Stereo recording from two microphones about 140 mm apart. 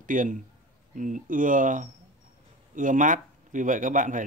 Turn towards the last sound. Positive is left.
turn(degrees=-65)  # may be behind; listen again after turning